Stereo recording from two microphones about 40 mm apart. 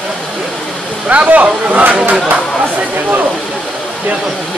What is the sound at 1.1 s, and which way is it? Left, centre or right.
Speech, right.